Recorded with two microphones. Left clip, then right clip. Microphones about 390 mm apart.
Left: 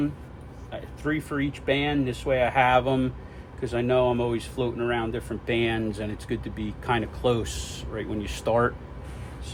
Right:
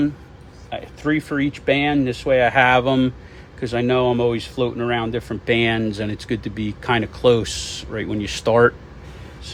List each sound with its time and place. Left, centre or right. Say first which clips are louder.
0.7 s speech: right 7 dB; right